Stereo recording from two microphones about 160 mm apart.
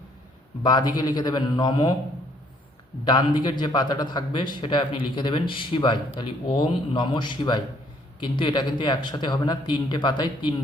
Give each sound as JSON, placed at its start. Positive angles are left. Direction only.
{"t": 0.6, "sound": "speech", "side_deg": 25}
{"t": 3.1, "sound": "speech", "side_deg": 30}